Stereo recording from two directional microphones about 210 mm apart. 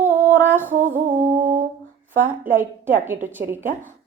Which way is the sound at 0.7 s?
40° right (ahead or behind).